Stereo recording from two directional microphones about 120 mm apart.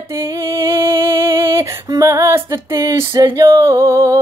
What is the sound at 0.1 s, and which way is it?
Music, 20° right (ahead or behind).